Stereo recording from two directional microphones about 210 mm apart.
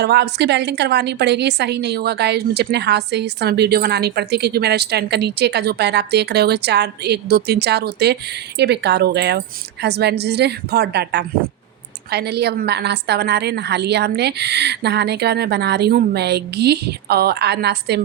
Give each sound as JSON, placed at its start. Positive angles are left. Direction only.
{"t": 0.0, "sound": "a woman's voice", "side_deg": -55}